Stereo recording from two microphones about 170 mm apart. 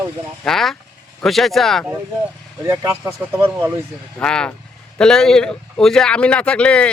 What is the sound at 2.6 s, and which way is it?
Speech, 15° right (ahead or behind).